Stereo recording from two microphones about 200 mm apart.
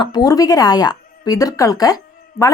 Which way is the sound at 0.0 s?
20° left (ahead or behind).